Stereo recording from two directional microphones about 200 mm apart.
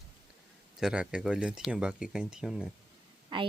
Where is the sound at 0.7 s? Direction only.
5° right (ahead or behind).